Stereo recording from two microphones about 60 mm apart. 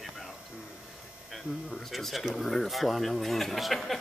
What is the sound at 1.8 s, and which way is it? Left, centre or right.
Speech, centre.